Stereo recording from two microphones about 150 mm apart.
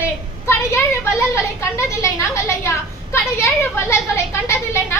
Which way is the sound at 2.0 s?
20° left (ahead or behind).